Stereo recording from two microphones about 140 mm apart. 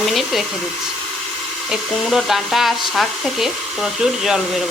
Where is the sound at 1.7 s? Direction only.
Centre (ahead or behind).